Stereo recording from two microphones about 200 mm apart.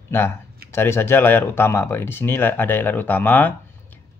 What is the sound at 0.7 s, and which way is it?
Speech, 10° left (ahead or behind).